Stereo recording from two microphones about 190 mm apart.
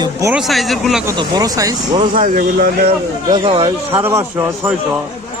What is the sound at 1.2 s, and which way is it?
Speech, 20° right (ahead or behind).